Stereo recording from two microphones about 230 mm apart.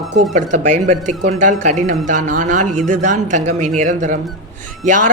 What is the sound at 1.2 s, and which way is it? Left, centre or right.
Speech, right.